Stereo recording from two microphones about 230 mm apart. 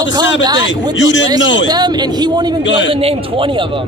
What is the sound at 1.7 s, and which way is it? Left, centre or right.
A man's voice, centre.